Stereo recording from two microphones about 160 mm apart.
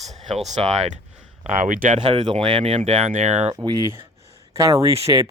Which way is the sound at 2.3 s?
45° right (ahead or behind).